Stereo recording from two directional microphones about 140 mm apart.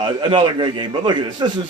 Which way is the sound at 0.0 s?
35° right (ahead or behind).